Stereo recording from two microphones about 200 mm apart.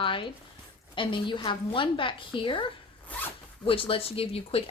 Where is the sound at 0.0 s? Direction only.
25° left (ahead or behind).